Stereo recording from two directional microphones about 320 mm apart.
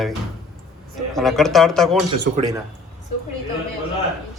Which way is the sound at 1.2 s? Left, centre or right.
Centre.